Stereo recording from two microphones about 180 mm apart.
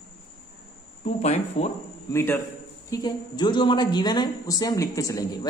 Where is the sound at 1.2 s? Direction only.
35° left (ahead or behind).